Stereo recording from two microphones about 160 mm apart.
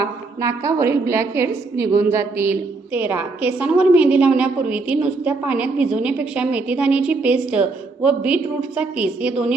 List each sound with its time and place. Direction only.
0.0 s a woman's voice: 20° right (ahead or behind)